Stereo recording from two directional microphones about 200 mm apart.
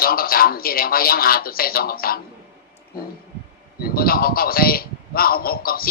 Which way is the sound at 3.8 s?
50° left (ahead or behind).